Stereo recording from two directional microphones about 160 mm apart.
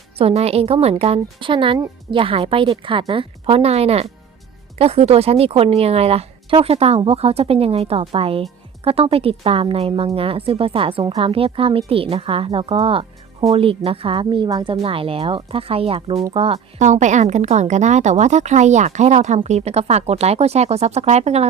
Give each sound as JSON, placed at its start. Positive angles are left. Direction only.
{"t": 0.2, "sound": "a woman's voice", "side_deg": -40}